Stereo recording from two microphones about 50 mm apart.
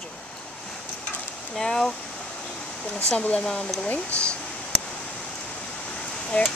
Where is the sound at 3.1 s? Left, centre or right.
Left.